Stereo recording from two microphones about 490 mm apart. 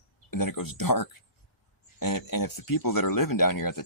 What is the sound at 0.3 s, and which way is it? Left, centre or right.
Speech, left.